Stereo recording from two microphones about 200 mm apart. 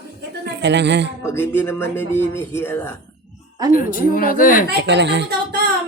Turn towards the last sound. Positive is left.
turn(degrees=-60)  # may be behind; listen again after turning